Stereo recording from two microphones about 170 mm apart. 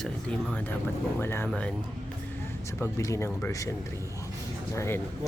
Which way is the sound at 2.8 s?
15° left (ahead or behind).